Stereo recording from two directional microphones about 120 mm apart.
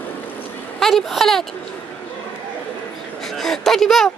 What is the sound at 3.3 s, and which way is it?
Speech, centre (ahead or behind).